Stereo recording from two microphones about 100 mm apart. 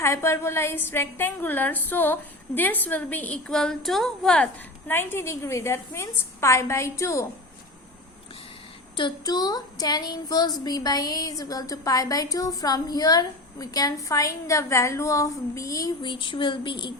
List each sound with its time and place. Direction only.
0.0 s a woman's voice: 30° left (ahead or behind); by 4.4 s 5° left (ahead or behind)
4.9 s a woman's voice: 20° left (ahead or behind)
9.0 s speech: 45° left (ahead or behind)
16.0 s speech: 50° left (ahead or behind)